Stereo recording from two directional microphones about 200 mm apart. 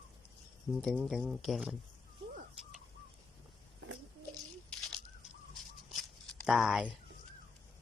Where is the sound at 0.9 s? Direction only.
Centre (ahead or behind).